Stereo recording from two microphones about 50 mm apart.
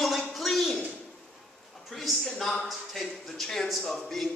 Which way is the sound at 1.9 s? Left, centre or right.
Centre.